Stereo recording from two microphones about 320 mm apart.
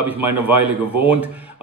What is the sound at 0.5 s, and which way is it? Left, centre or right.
Speech, right.